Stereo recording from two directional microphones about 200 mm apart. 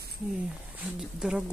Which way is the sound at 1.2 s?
5° right (ahead or behind).